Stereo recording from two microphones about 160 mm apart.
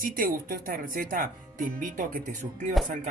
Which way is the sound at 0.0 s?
60° right (ahead or behind).